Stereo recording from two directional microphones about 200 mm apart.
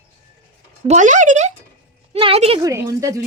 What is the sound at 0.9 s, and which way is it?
A woman's voice, 40° right (ahead or behind).